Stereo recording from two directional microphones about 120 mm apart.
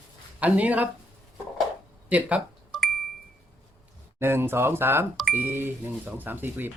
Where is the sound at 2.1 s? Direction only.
10° right (ahead or behind).